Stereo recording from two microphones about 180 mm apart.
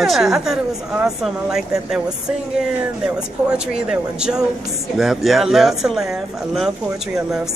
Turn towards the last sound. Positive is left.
turn(degrees=0)  # may be behind; listen again after turning